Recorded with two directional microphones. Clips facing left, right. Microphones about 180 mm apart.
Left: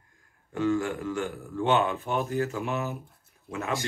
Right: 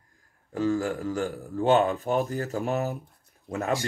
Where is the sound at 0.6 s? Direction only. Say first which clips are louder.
Right 1 dB; 35° right (ahead or behind).